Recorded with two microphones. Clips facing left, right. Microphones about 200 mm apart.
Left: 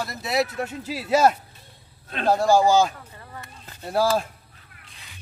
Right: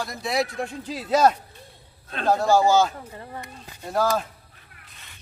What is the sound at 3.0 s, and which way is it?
Speech, 30° right (ahead or behind).